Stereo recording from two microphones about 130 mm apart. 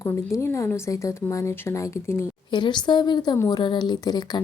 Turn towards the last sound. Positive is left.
turn(degrees=35)  # may be behind; listen again after turning